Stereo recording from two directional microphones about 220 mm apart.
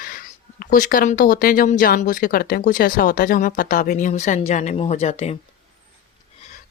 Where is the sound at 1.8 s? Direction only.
40° left (ahead or behind).